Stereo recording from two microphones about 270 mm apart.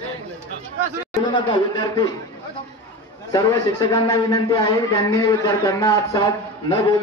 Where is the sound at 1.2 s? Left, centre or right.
Centre.